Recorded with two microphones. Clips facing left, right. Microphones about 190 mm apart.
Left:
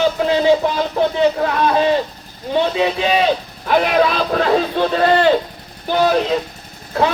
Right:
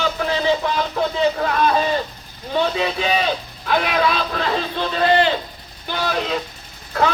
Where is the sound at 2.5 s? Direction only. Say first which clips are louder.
Left 4 dB; 25° left (ahead or behind).